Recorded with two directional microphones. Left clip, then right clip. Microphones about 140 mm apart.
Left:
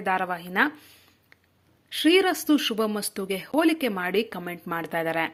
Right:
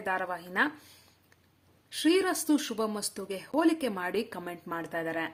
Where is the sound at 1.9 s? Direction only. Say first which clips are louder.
Left 6 dB; 20° left (ahead or behind); by 5.3 s 35° left (ahead or behind).